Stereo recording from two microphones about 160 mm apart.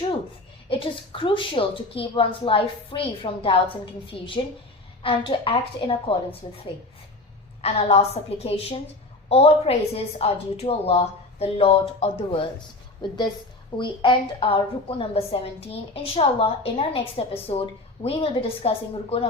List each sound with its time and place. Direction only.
0.7 s a woman's voice: 35° left (ahead or behind)
7.6 s a woman's voice: 40° left (ahead or behind)